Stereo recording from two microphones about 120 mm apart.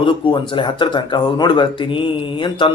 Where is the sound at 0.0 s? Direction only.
45° left (ahead or behind).